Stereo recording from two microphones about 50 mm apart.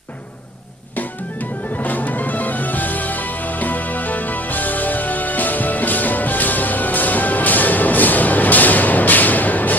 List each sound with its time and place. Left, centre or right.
1.8 s music: left